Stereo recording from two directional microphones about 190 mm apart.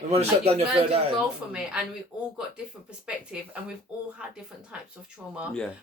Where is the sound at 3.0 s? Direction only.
5° right (ahead or behind).